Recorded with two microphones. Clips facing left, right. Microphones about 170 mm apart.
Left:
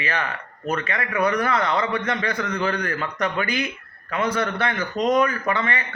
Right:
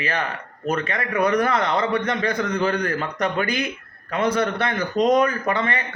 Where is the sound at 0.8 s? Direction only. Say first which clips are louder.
Right 1 dB; 40° right (ahead or behind).